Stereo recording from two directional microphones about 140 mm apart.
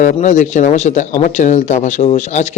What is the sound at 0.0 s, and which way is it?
Speech, 65° left (ahead or behind).